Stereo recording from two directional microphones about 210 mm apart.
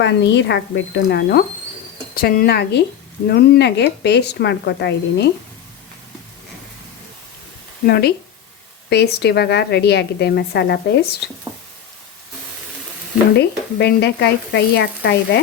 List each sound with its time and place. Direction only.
0.0 s a woman's voice: 55° left (ahead or behind)
7.9 s a woman's voice: 50° left (ahead or behind)
13.3 s a woman's voice: 55° left (ahead or behind)